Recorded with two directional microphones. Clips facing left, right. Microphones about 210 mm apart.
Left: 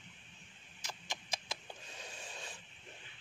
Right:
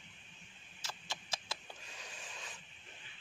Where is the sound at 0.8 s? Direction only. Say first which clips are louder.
Left 1 dB; 15° left (ahead or behind).